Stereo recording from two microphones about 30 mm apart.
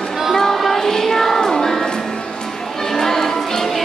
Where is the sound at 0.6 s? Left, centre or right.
Centre.